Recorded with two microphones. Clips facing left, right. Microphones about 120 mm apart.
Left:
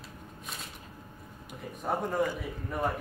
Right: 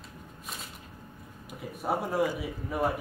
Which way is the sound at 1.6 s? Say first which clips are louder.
Right 1 dB; 5° right (ahead or behind).